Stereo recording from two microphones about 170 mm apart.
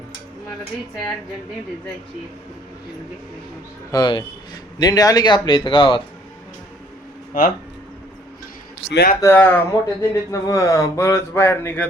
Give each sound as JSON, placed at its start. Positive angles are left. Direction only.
{"t": 3.9, "sound": "speech", "side_deg": 25}
{"t": 7.3, "sound": "speech", "side_deg": 55}
{"t": 9.2, "sound": "speech", "side_deg": 10}